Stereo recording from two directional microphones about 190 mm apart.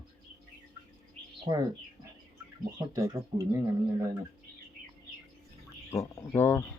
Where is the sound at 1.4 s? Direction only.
20° right (ahead or behind).